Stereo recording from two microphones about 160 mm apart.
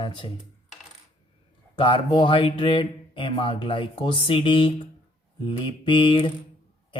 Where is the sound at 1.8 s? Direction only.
30° left (ahead or behind).